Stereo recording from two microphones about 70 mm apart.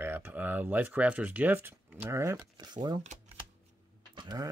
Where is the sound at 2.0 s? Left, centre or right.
Right.